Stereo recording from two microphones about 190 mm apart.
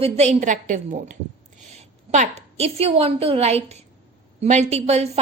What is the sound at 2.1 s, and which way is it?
A woman's voice, 35° right (ahead or behind).